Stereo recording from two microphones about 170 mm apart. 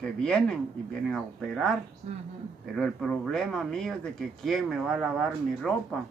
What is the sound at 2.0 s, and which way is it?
Speech, 40° right (ahead or behind).